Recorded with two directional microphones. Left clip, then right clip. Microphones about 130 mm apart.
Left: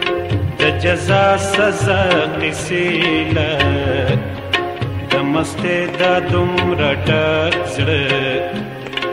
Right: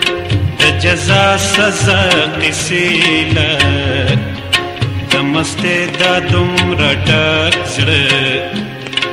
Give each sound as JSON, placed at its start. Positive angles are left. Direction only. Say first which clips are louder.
{"t": 0.0, "sound": "music", "louder": "right 3 dB", "side_deg": 35}